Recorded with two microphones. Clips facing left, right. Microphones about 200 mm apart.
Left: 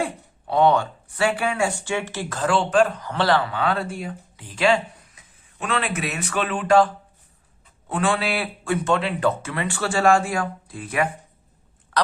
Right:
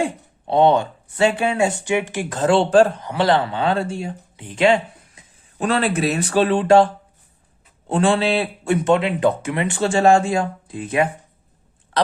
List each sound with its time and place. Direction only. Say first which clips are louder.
0.0 s speech: right 4 dB; 25° right (ahead or behind)
3.1 s speech: right 3 dB; 15° right (ahead or behind)
5.5 s speech: right 6 dB; 35° right (ahead or behind)